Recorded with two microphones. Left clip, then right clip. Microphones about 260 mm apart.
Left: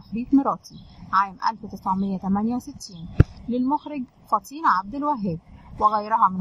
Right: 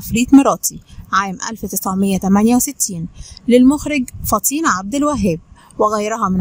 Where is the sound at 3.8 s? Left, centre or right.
Right.